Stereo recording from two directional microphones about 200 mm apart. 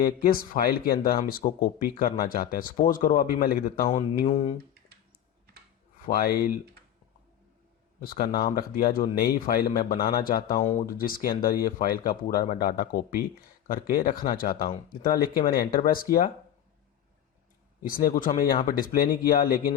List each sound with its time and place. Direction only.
0.0 s speech: 45° left (ahead or behind)
4.3 s speech: 35° left (ahead or behind)
6.1 s speech: 50° left (ahead or behind)
8.0 s speech: 50° left (ahead or behind)
17.8 s speech: 45° left (ahead or behind)